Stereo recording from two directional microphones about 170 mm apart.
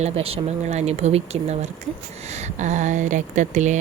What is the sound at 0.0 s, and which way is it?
Speech, 35° right (ahead or behind).